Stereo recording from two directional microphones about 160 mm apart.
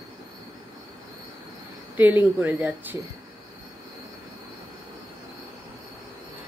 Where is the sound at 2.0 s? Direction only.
10° right (ahead or behind).